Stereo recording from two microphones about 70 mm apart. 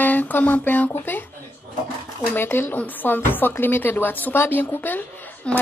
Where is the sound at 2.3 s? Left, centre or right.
Left.